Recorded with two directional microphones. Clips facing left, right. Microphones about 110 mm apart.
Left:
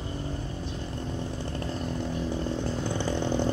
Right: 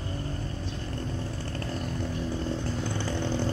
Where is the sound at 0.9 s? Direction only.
20° left (ahead or behind).